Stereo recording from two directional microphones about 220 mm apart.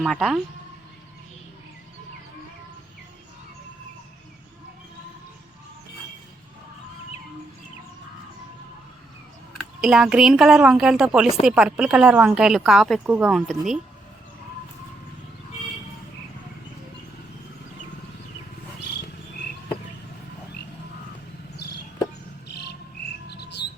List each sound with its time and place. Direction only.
0.0 s speech: centre (ahead or behind)
9.8 s speech: 5° right (ahead or behind)
23.3 s insect: 50° left (ahead or behind)